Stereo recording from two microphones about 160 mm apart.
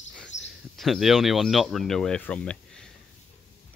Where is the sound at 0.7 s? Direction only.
Centre (ahead or behind).